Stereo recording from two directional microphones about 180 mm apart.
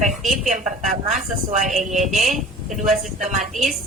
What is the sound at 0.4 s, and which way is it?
Speech, 45° right (ahead or behind).